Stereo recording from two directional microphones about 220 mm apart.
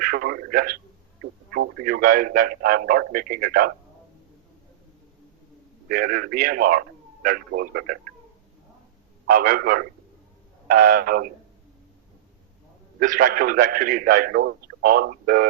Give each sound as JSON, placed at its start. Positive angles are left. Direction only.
{"t": 0.0, "sound": "a man's voice", "side_deg": -40}
{"t": 5.9, "sound": "a man's voice", "side_deg": -40}
{"t": 9.3, "sound": "a man's voice", "side_deg": -40}
{"t": 13.0, "sound": "a man's voice", "side_deg": -40}